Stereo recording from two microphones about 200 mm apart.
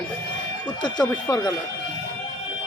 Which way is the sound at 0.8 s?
20° left (ahead or behind).